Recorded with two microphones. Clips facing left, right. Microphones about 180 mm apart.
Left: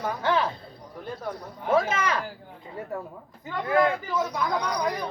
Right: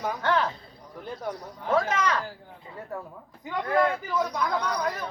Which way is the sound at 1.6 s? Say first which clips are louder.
Left 1 dB; 10° left (ahead or behind).